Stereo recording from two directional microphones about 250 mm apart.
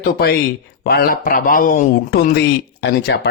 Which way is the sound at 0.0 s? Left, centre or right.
Left.